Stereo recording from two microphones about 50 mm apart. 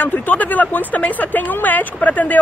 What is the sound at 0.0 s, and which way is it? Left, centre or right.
Speech, left.